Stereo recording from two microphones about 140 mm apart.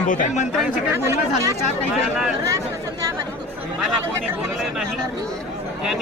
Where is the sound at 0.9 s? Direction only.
20° right (ahead or behind).